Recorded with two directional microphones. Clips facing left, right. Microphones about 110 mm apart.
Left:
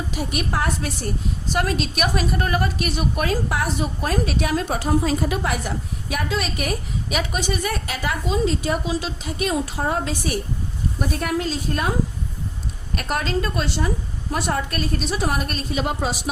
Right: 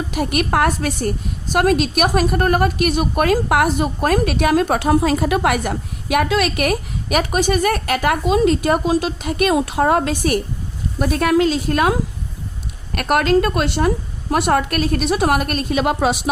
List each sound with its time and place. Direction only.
0.1 s a woman's voice: 65° right (ahead or behind)
11.0 s a woman's voice: 90° right
13.0 s a woman's voice: 65° right (ahead or behind)